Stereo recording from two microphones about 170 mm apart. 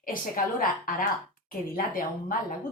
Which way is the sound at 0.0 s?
55° left (ahead or behind).